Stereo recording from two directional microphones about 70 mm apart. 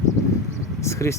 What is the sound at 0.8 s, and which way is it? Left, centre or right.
Speech, left.